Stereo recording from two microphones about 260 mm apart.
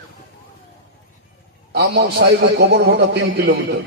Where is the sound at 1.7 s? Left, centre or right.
Right.